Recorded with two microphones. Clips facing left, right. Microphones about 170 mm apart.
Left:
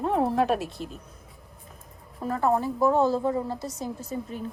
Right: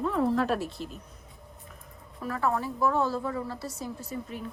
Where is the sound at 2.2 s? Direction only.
25° left (ahead or behind).